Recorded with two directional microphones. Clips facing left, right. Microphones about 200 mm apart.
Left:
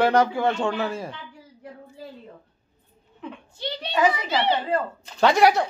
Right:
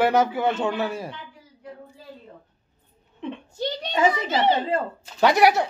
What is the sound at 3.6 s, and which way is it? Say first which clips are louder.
A child's voice: even; 45° right (ahead or behind).